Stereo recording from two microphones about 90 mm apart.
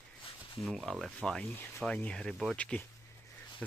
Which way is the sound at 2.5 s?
15° left (ahead or behind).